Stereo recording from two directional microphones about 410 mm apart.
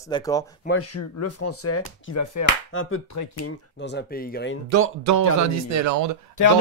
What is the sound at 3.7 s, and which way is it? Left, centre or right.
Speech, left.